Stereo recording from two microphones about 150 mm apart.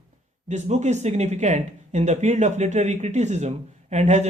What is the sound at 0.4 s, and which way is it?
Speech, 50° right (ahead or behind).